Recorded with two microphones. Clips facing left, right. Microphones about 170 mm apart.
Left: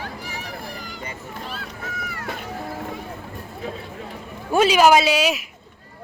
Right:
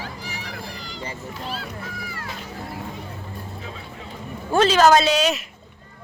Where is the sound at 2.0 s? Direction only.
60° left (ahead or behind).